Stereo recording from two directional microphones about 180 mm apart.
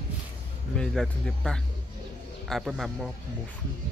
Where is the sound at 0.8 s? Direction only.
5° left (ahead or behind).